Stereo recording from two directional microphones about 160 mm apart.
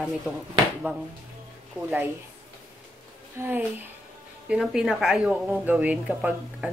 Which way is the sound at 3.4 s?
15° right (ahead or behind).